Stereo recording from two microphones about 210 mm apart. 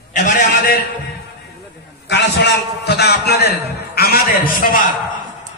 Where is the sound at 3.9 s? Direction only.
45° left (ahead or behind).